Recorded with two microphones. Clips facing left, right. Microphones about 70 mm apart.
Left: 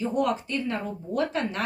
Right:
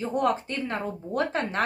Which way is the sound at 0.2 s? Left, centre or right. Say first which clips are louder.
Right 2 dB; right.